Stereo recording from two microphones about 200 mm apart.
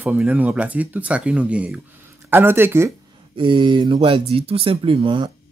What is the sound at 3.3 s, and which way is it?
Speech, 25° right (ahead or behind).